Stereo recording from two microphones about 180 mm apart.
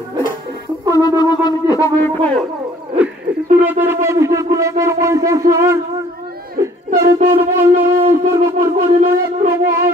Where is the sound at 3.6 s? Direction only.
10° right (ahead or behind).